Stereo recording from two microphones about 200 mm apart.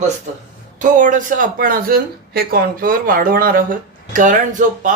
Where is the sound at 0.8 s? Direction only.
40° right (ahead or behind).